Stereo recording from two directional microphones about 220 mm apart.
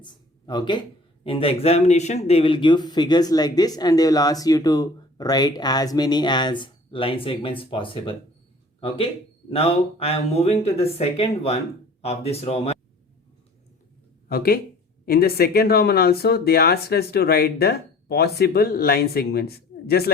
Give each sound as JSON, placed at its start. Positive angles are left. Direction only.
{"t": 0.0, "sound": "a sound", "side_deg": 20}
{"t": 1.2, "sound": "speech", "side_deg": 25}
{"t": 9.5, "sound": "speech", "side_deg": 25}
{"t": 14.3, "sound": "speech", "side_deg": 45}